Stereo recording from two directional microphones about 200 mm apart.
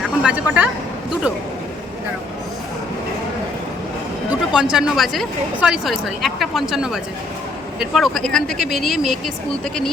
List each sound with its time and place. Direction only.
0.0 s speech: 5° right (ahead or behind)
4.5 s a woman's voice: 5° right (ahead or behind)